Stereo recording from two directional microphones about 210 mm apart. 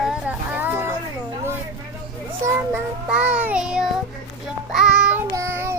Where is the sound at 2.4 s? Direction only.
10° right (ahead or behind).